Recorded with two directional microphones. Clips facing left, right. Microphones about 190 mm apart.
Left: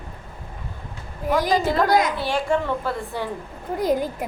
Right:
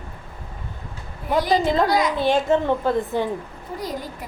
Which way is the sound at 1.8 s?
50° left (ahead or behind).